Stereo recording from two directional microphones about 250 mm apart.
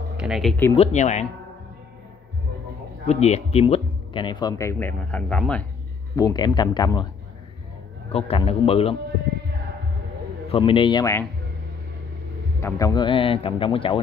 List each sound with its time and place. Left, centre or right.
0.2 s speech: centre
0.7 s speech: left
3.1 s speech: left; by 5.7 s centre
6.1 s speech: centre
8.1 s speech: left
10.5 s speech: centre
12.5 s speech: centre